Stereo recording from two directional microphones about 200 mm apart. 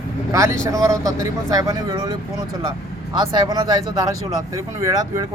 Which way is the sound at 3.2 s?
20° right (ahead or behind).